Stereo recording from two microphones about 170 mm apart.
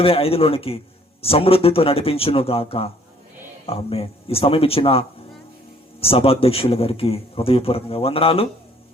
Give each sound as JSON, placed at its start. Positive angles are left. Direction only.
{"t": 0.0, "sound": "speech", "side_deg": 35}